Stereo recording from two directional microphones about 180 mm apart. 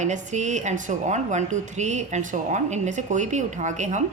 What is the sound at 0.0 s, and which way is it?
Speech, 40° right (ahead or behind).